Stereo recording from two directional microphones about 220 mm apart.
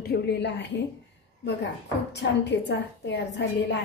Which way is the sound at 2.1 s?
50° left (ahead or behind).